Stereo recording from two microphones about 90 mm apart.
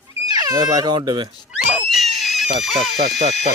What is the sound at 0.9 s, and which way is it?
Speech, 60° right (ahead or behind).